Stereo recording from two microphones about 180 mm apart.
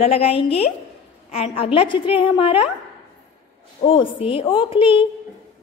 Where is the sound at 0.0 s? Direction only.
35° left (ahead or behind).